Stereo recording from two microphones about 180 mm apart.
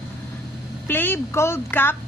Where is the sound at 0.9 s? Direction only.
10° left (ahead or behind).